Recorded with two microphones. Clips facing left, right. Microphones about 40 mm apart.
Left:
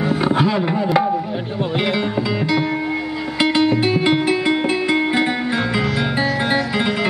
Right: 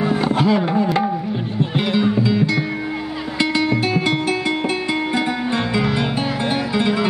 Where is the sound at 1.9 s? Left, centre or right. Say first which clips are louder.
Right 2 dB; centre; by 5.3 s left.